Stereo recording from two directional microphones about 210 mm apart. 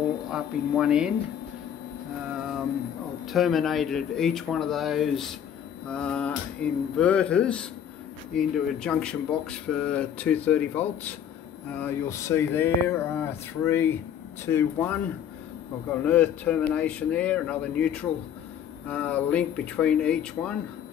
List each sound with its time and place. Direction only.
0.3 s speech: 5° right (ahead or behind)
3.3 s speech: centre (ahead or behind)